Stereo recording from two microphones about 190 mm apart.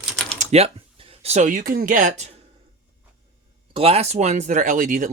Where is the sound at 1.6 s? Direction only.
45° right (ahead or behind).